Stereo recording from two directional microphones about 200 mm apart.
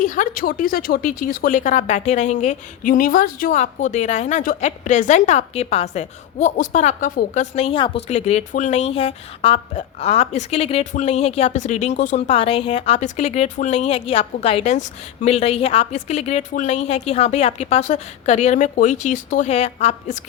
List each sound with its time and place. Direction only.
0.0 s a woman's voice: 40° left (ahead or behind)